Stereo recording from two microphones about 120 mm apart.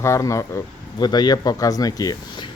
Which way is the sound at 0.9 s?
35° left (ahead or behind).